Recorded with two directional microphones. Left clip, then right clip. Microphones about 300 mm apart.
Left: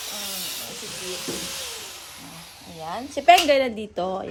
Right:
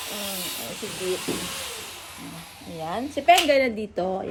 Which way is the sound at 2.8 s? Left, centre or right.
Centre.